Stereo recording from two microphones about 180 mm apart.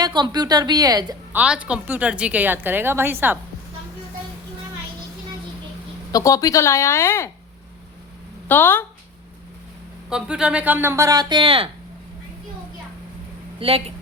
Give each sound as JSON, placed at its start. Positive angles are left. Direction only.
{"t": 0.0, "sound": "a woman's voice", "side_deg": -25}
{"t": 1.3, "sound": "a woman's voice", "side_deg": -5}
{"t": 6.1, "sound": "speech", "side_deg": 20}
{"t": 8.4, "sound": "speech", "side_deg": 10}
{"t": 10.1, "sound": "a woman's voice", "side_deg": -5}
{"t": 13.6, "sound": "speech", "side_deg": -30}